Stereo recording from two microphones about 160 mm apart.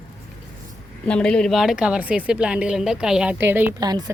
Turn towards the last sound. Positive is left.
turn(degrees=-25)  # may be behind; listen again after turning